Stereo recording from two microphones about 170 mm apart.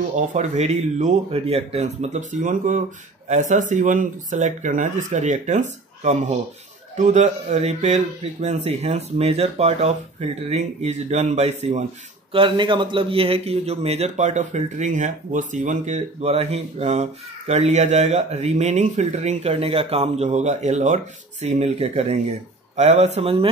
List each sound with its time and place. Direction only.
0.1 s a man's voice: 45° right (ahead or behind)
12.3 s a man's voice: 30° right (ahead or behind)